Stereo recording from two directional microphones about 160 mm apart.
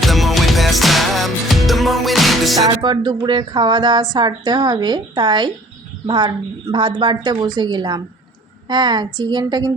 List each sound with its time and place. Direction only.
0.0 s music: centre (ahead or behind)
2.6 s speech: 25° right (ahead or behind)